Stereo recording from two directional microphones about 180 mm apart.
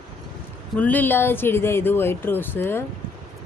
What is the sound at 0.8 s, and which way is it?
Speech, 10° left (ahead or behind).